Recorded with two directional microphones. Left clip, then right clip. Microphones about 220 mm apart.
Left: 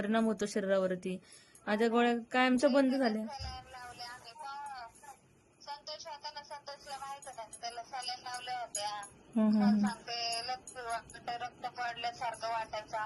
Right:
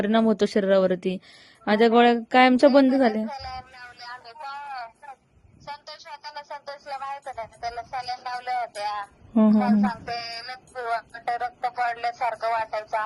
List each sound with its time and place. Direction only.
0.0 s music: 30° right (ahead or behind)
1.6 s a sound: 35° right (ahead or behind)
10.3 s music: 40° right (ahead or behind)